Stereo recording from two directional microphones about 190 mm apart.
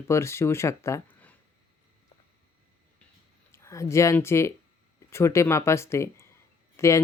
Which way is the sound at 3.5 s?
15° left (ahead or behind).